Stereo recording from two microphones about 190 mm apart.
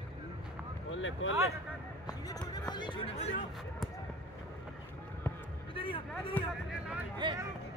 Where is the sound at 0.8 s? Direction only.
90° left.